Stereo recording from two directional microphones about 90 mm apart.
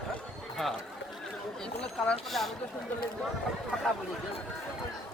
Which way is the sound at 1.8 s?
5° left (ahead or behind).